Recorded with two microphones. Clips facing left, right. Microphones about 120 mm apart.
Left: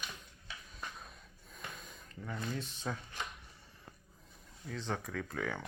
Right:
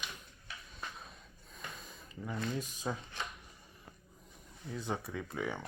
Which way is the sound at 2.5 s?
10° right (ahead or behind).